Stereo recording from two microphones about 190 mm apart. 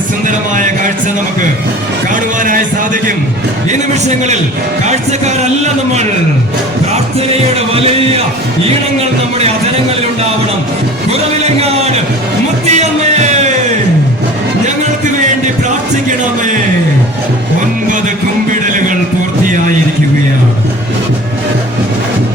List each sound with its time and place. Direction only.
0.3 s a sound: 45° right (ahead or behind)
2.4 s music: 45° right (ahead or behind)
3.7 s a man's voice: 35° right (ahead or behind)
7.5 s music: 30° right (ahead or behind)
12.6 s music: 35° right (ahead or behind)